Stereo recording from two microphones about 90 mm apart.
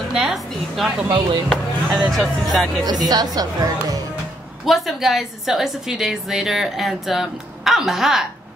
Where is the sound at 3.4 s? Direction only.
45° right (ahead or behind).